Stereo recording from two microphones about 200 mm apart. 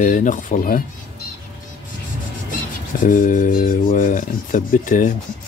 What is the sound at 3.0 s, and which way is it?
Speech, 40° left (ahead or behind).